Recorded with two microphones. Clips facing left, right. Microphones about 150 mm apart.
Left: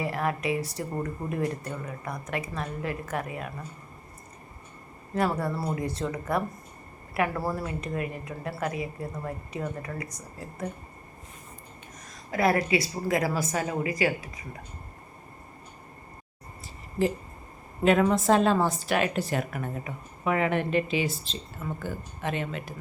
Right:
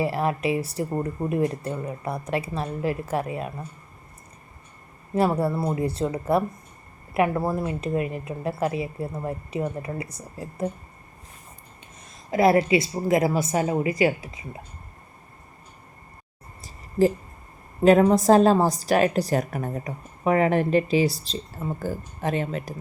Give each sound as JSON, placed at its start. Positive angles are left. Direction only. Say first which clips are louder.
{"t": 0.0, "sound": "a woman's voice", "louder": "right 5 dB", "side_deg": -25}
{"t": 5.1, "sound": "a woman's voice", "louder": "right 5 dB", "side_deg": -25}
{"t": 12.3, "sound": "a woman's voice", "louder": "right 6 dB", "side_deg": -25}
{"t": 17.8, "sound": "a woman's voice", "louder": "right 6 dB", "side_deg": -35}